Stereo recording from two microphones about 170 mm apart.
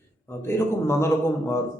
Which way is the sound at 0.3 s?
15° left (ahead or behind).